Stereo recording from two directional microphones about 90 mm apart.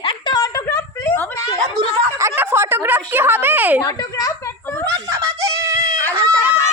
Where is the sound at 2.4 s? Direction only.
25° right (ahead or behind).